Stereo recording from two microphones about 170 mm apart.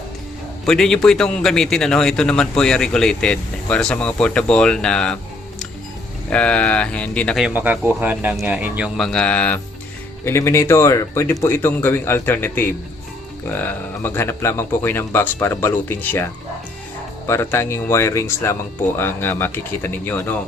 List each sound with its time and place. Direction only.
0.6 s a man's voice: 5° left (ahead or behind)
7.4 s speech: 10° right (ahead or behind)
9.0 s speech: 5° left (ahead or behind)
17.2 s speech: 15° left (ahead or behind)